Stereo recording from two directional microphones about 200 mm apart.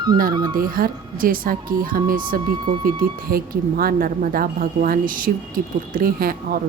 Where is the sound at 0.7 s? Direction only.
45° right (ahead or behind).